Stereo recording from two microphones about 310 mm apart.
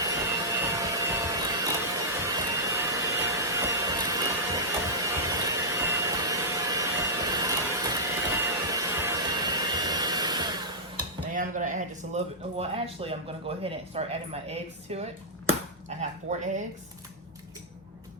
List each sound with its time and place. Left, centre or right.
0.0 s vacuum cleaner: centre
8.4 s music: centre
11.3 s speech: right